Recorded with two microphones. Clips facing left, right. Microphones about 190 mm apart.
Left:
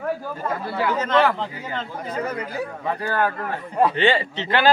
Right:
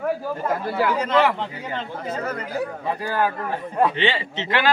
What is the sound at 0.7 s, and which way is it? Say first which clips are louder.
Speech: even; 10° right (ahead or behind).